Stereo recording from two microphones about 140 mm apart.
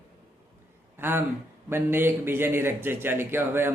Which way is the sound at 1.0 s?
15° right (ahead or behind).